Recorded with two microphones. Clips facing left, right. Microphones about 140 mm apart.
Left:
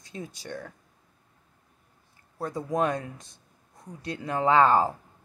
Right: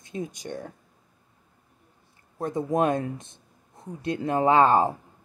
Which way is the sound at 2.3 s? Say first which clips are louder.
Right 3 dB; 20° right (ahead or behind).